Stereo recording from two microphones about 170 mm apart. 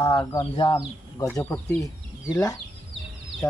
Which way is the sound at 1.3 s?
10° left (ahead or behind).